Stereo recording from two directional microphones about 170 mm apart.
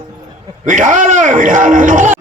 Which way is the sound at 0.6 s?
50° right (ahead or behind).